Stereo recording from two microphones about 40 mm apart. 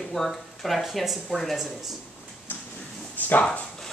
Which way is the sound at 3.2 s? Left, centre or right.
Left.